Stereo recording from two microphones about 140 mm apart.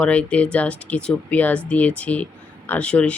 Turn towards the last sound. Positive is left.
turn(degrees=10)  # may be behind; listen again after turning